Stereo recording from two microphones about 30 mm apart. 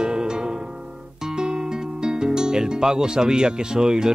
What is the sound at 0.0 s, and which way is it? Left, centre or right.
Music, right.